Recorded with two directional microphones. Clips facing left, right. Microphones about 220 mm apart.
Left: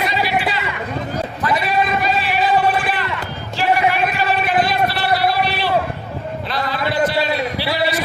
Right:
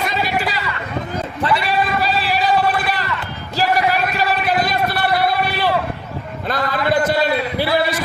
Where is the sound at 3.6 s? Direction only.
40° right (ahead or behind).